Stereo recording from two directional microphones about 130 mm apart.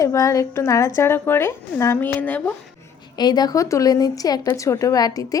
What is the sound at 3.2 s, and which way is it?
A woman's voice, 30° left (ahead or behind).